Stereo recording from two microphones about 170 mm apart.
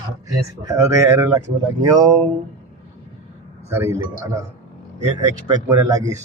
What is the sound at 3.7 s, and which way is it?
Speech, 15° right (ahead or behind).